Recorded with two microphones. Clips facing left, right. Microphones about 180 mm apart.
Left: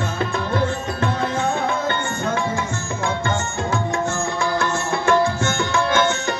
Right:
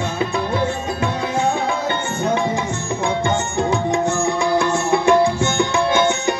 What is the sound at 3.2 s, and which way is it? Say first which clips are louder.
Tabla: right 4 dB; 15° right (ahead or behind).